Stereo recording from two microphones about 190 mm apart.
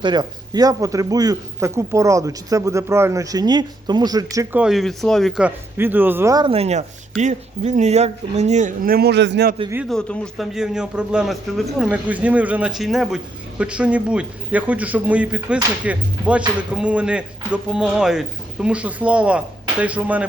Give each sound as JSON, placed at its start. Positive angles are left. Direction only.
{"t": 0.0, "sound": "speech", "side_deg": -20}
{"t": 4.6, "sound": "a man's voice", "side_deg": 0}
{"t": 5.7, "sound": "speech", "side_deg": -10}
{"t": 6.5, "sound": "speech", "side_deg": -35}
{"t": 9.9, "sound": "a man's voice", "side_deg": 5}